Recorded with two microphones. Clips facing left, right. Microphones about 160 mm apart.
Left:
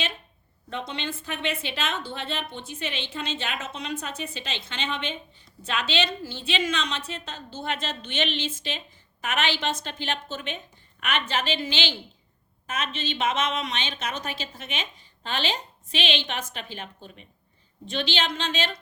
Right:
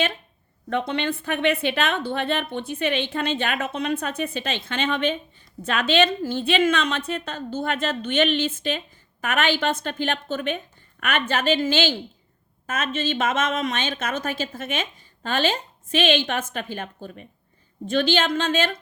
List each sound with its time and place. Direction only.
0.7 s a woman's voice: 55° right (ahead or behind)